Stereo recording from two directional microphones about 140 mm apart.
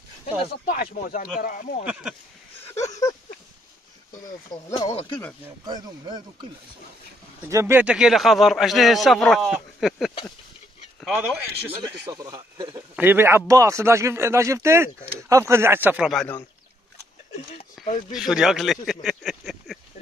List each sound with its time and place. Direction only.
0.7 s speech: 80° left
2.7 s a sound: 25° left (ahead or behind)
4.5 s speech: 30° left (ahead or behind)
5.7 s speech: 30° right (ahead or behind)
7.4 s a man's voice: 20° right (ahead or behind)
12.1 s a man's voice: 25° right (ahead or behind)
12.9 s a man's voice: 15° right (ahead or behind)
17.8 s a sound: centre (ahead or behind)